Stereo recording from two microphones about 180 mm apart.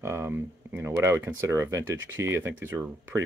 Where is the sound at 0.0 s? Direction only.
15° right (ahead or behind).